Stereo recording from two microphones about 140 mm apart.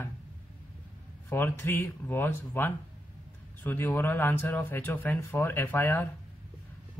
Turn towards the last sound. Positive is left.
turn(degrees=15)  # may be behind; listen again after turning